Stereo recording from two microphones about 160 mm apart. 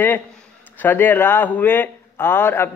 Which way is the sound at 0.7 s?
10° left (ahead or behind).